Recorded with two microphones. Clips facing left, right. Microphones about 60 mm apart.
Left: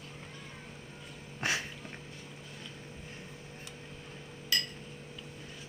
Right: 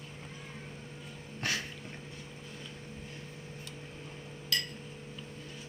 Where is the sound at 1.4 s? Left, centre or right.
Centre.